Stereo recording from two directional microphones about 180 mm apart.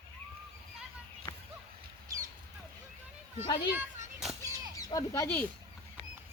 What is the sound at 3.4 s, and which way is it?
Speech, 30° left (ahead or behind).